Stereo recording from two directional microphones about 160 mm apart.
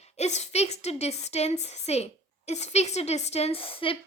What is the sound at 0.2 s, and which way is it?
A woman's voice, 45° left (ahead or behind).